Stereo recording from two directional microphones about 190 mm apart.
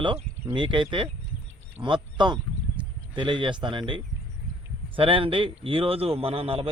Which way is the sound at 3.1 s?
25° right (ahead or behind).